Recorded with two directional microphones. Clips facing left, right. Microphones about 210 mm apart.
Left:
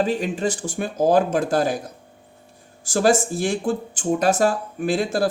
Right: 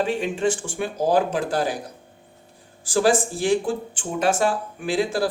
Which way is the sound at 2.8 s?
45° left (ahead or behind).